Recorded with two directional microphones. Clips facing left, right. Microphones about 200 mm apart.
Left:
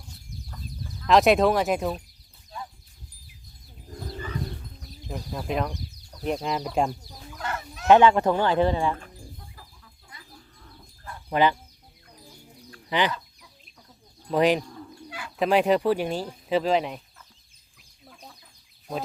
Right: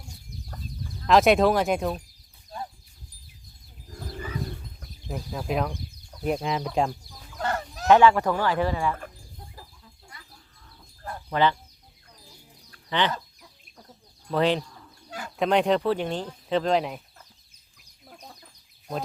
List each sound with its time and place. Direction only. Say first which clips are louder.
1.0 s speech: even; centre (ahead or behind)
5.1 s speech: right 1 dB; centre (ahead or behind)
7.3 s fowl: right 5 dB; 35° right (ahead or behind)
7.9 s speech: left 1 dB; 20° left (ahead or behind)
11.3 s speech: left 1 dB; 15° left (ahead or behind)
12.9 s speech: left 1 dB; 10° left (ahead or behind)
14.3 s speech: left 2 dB; 15° left (ahead or behind)